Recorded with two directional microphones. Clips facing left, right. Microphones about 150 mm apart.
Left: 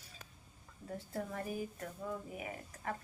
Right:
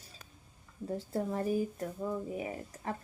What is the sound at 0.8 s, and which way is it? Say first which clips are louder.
Speech: right 7 dB; 30° right (ahead or behind).